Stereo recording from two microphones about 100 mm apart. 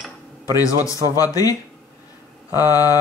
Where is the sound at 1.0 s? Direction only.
35° left (ahead or behind).